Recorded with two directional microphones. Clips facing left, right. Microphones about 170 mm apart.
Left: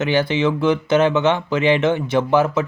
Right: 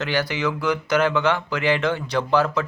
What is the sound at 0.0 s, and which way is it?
Speech, 25° left (ahead or behind).